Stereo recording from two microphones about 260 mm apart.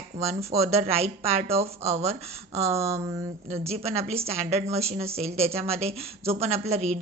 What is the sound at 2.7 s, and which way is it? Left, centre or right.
Speech, centre.